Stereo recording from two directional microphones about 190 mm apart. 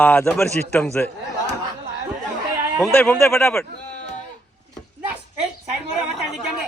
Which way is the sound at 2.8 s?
5° left (ahead or behind).